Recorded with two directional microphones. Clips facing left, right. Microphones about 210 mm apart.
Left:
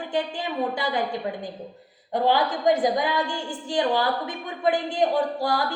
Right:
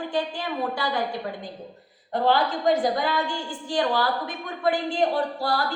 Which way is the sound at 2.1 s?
15° left (ahead or behind).